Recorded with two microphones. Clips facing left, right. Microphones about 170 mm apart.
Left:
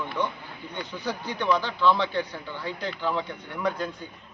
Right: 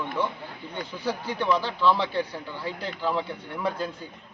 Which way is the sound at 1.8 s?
5° right (ahead or behind).